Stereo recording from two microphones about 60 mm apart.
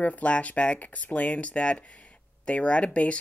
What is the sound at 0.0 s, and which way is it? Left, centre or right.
Speech, left.